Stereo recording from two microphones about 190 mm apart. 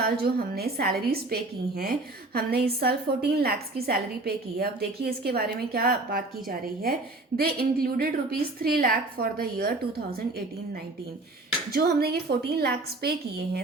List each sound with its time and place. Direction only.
0.0 s a woman's voice: 55° right (ahead or behind)
11.7 s a woman's voice: 55° right (ahead or behind)